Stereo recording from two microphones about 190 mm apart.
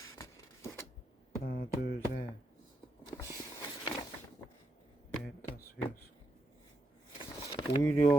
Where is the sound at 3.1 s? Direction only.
15° left (ahead or behind).